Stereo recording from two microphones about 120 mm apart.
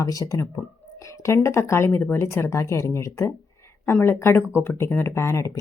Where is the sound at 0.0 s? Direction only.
30° left (ahead or behind).